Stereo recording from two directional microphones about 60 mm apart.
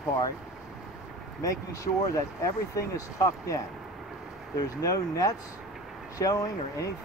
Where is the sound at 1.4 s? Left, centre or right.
Left.